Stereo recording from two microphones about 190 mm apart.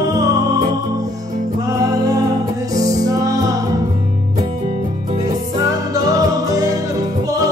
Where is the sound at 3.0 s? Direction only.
20° right (ahead or behind).